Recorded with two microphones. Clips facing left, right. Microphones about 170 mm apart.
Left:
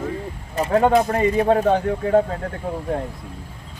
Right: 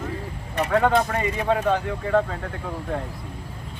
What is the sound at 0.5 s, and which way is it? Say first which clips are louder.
Speech: left 3 dB; 25° left (ahead or behind).